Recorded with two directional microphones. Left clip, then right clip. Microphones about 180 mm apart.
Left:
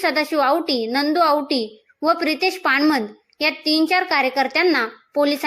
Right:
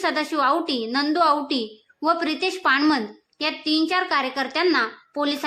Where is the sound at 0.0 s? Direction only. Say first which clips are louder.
Left 3 dB; 15° left (ahead or behind).